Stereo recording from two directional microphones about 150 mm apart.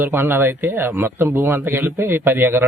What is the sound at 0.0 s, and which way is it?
Speech, 15° right (ahead or behind).